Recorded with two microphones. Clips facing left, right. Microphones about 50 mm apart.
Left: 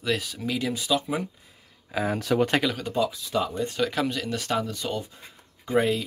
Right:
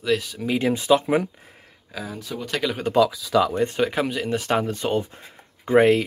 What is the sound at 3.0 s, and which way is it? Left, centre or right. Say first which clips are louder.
Speech: right 8 dB; right.